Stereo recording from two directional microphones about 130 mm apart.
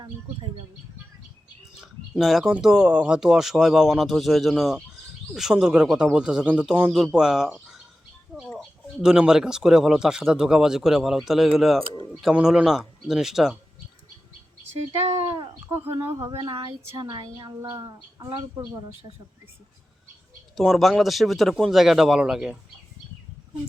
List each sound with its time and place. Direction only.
1.8 s speech: centre (ahead or behind)
14.9 s speech: 50° right (ahead or behind)
15.7 s speech: 15° right (ahead or behind)
16.4 s speech: 35° right (ahead or behind)
20.6 s speech: centre (ahead or behind)